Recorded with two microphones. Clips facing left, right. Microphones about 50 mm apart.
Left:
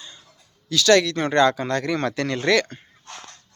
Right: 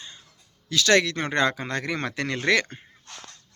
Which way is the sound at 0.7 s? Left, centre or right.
Right.